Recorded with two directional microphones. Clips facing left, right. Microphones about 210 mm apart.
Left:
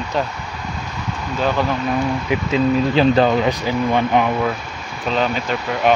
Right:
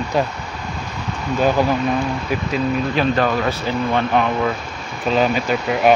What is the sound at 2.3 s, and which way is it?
Speech, 25° left (ahead or behind).